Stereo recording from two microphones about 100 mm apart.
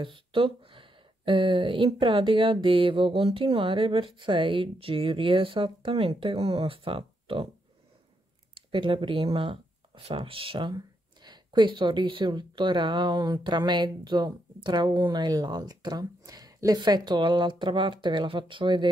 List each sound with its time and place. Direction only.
0.0 s speech: 60° right (ahead or behind)
8.5 s speech: 55° right (ahead or behind)
11.2 s speech: 50° right (ahead or behind)